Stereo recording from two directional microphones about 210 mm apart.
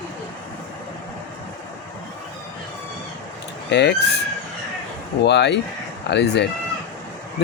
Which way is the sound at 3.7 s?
55° left (ahead or behind).